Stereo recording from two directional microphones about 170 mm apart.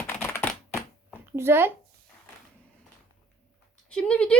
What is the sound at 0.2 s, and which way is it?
Typewriter, 15° left (ahead or behind).